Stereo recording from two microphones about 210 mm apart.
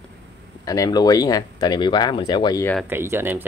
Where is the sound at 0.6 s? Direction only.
15° left (ahead or behind).